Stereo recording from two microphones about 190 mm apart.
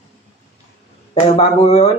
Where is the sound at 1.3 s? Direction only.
30° left (ahead or behind).